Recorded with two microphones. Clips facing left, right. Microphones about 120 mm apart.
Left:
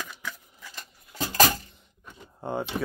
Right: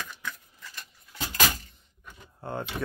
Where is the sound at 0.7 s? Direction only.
35° left (ahead or behind).